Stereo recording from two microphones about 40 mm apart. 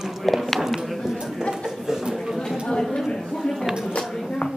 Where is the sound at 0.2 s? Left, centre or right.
Centre.